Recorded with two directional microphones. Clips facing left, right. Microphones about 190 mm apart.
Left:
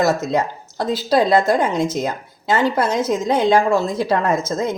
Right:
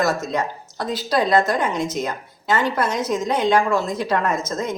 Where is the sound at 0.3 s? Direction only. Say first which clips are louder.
Left 4 dB; 30° left (ahead or behind).